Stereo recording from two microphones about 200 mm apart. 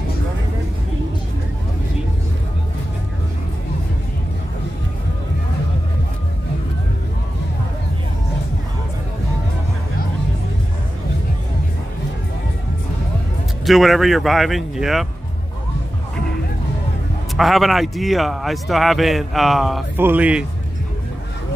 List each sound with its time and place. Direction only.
13.7 s a man's voice: centre (ahead or behind)
17.4 s a man's voice: centre (ahead or behind)